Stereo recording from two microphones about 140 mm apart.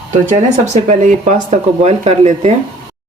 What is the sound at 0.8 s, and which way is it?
Speech, 60° right (ahead or behind).